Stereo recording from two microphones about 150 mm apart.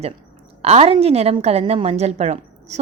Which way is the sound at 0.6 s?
45° right (ahead or behind).